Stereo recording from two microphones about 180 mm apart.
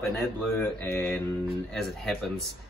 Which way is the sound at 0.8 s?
15° left (ahead or behind).